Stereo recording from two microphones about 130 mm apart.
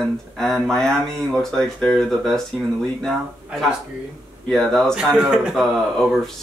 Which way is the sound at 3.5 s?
10° right (ahead or behind).